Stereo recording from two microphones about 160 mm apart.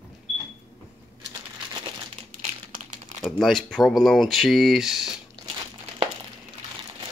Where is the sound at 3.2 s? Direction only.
Centre (ahead or behind).